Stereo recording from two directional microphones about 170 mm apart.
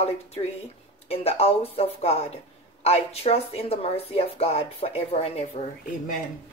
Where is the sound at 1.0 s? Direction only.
35° left (ahead or behind).